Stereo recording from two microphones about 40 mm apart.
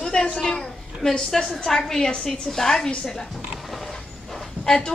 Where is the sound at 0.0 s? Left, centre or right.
Centre.